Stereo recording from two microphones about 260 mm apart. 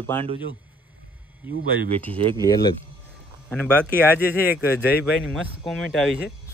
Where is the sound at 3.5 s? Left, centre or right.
Centre.